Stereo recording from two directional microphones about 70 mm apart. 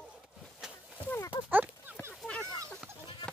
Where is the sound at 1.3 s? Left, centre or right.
Right.